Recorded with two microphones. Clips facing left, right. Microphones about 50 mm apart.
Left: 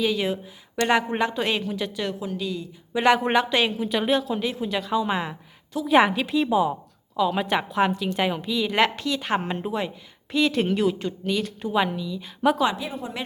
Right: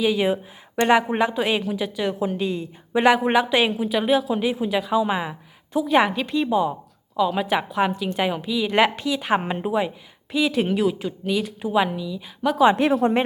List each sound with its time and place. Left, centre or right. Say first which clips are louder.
0.0 s a woman's voice: right 4 dB; centre
2.1 s a woman's voice: right 5 dB; right
2.9 s a woman's voice: right 2 dB; centre
12.7 s speech: right 13 dB; right